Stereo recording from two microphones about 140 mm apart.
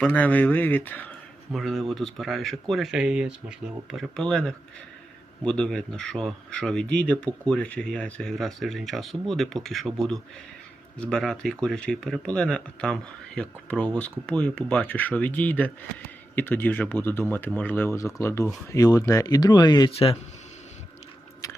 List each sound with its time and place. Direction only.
0.0 s speech: 10° left (ahead or behind)
1.5 s speech: centre (ahead or behind); by 19.9 s 30° left (ahead or behind)